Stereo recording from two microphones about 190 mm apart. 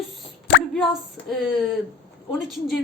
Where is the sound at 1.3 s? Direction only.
Centre (ahead or behind).